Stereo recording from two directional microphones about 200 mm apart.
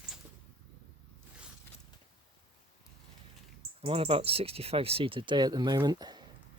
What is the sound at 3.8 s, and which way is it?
Speech, 30° right (ahead or behind).